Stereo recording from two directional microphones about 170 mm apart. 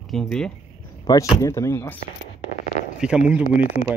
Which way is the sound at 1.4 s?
15° left (ahead or behind).